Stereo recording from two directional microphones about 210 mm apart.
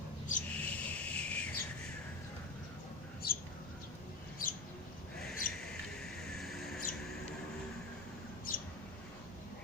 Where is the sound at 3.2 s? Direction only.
45° left (ahead or behind).